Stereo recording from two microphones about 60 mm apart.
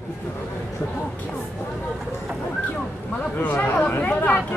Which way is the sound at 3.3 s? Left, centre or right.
Left.